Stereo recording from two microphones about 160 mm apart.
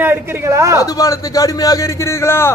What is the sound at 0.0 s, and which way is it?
Speech, 15° right (ahead or behind).